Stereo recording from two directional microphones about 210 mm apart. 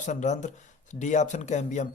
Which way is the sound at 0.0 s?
35° left (ahead or behind).